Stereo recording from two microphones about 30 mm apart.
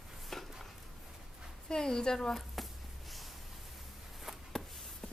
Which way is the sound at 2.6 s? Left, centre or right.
Centre.